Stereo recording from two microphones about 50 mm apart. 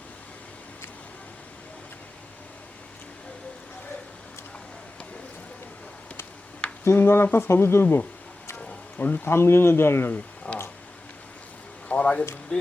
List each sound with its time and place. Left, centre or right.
6.8 s speech: left
8.5 s music: left
9.2 s speech: left
10.5 s a sound: left
11.9 s a sound: left
12.5 s speech: left